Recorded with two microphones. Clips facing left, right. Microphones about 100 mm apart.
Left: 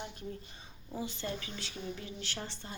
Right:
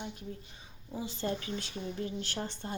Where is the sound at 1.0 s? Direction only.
40° right (ahead or behind).